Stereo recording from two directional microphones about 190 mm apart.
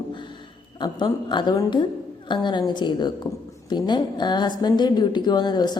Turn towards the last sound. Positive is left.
turn(degrees=20)  # may be behind; listen again after turning